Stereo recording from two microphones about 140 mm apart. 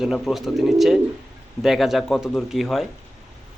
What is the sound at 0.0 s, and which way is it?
Speech, 5° right (ahead or behind).